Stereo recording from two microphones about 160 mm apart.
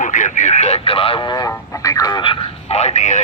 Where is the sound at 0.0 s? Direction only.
50° left (ahead or behind); by 1.5 s 25° left (ahead or behind).